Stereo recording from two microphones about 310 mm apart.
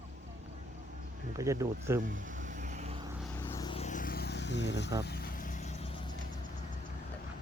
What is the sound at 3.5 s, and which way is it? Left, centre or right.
Vehicle, centre.